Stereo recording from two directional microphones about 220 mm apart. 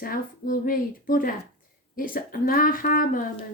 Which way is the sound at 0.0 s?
40° left (ahead or behind).